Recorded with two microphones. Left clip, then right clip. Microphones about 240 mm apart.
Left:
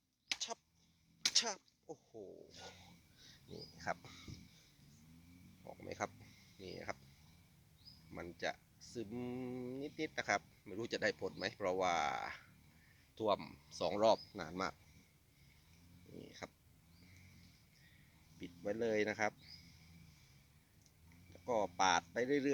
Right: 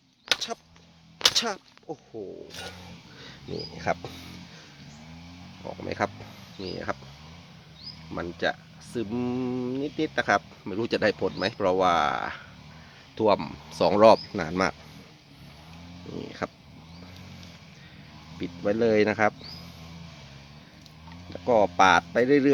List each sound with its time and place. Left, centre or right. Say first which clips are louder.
0.3 s a sound: right 12 dB; centre
3.8 s speech: right 14 dB; centre
5.6 s speech: right 15 dB; centre
8.1 s speech: right 15 dB; centre
16.4 s speech: right 19 dB; centre
18.3 s speech: right 15 dB; centre
21.4 s speech: right 16 dB; centre